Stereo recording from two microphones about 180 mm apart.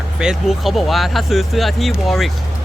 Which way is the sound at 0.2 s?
Centre (ahead or behind).